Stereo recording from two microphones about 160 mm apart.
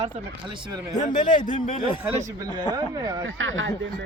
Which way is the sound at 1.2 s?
30° left (ahead or behind).